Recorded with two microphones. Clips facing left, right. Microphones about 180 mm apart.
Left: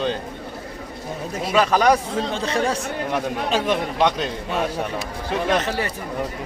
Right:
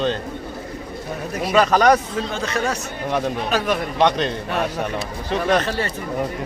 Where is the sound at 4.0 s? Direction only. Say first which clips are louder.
Right 2 dB; 5° left (ahead or behind).